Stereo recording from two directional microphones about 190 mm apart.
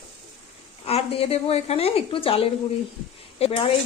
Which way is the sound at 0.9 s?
30° left (ahead or behind).